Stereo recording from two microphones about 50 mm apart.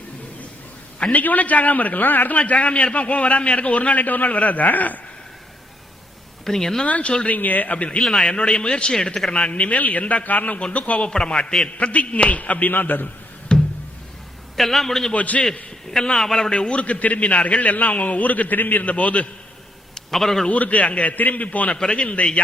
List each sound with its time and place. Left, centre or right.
1.1 s a man's voice: left
2.4 s a man's voice: left
6.4 s speech: centre
6.8 s a man's voice: left
13.5 s a sound: left
14.5 s a man's voice: centre
15.1 s a man's voice: left
16.1 s a man's voice: centre
16.5 s a man's voice: left
20.1 s a man's voice: centre
20.5 s a man's voice: left
21.8 s a man's voice: centre